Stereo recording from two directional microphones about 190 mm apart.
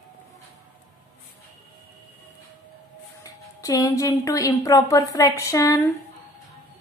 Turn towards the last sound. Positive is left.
turn(degrees=15)  # may be behind; listen again after turning